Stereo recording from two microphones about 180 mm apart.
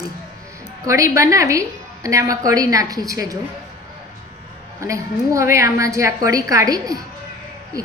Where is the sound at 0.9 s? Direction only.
15° right (ahead or behind).